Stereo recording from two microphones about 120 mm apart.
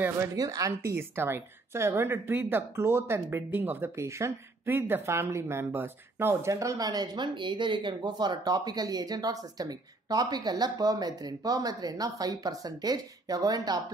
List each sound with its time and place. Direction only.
0.4 s a woman's voice: 30° right (ahead or behind)